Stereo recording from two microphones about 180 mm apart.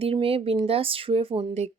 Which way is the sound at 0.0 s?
30° right (ahead or behind).